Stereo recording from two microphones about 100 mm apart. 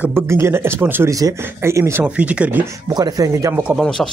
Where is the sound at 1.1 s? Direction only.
30° right (ahead or behind).